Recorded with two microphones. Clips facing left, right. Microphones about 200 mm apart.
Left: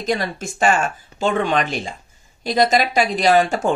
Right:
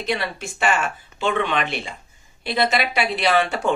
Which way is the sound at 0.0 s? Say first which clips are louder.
Left 3 dB; 45° left (ahead or behind).